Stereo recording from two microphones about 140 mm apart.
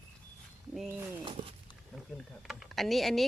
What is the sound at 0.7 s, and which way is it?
Speech, 5° right (ahead or behind).